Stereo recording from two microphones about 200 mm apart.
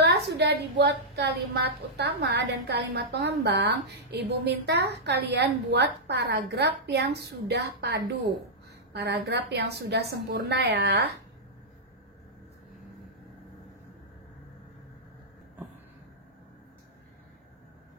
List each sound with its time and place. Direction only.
0.0 s a woman's voice: 55° right (ahead or behind)